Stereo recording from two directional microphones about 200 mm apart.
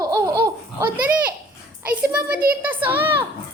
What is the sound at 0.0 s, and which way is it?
Laughter, 20° right (ahead or behind).